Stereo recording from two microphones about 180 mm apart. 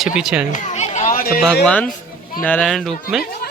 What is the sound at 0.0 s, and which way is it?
Speech, centre (ahead or behind).